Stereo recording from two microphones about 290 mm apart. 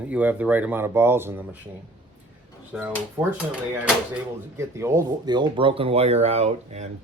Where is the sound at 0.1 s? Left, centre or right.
Centre.